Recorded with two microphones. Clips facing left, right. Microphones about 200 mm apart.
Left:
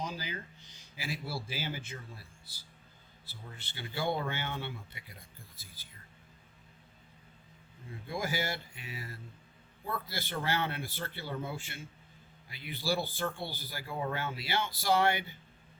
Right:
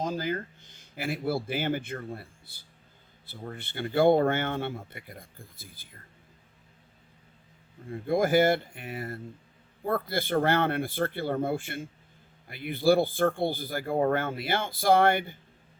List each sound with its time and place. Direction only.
0.0 s speech: 50° right (ahead or behind)
7.9 s speech: 50° right (ahead or behind)